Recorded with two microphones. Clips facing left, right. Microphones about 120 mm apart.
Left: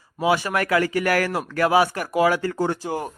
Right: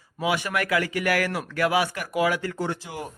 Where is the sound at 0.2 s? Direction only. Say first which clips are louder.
Left 4 dB; 35° left (ahead or behind).